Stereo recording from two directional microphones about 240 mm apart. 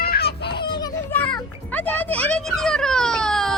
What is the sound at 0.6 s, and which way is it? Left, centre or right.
Children playing, centre.